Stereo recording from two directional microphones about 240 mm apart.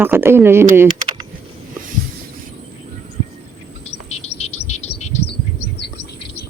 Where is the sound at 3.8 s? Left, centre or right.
Left.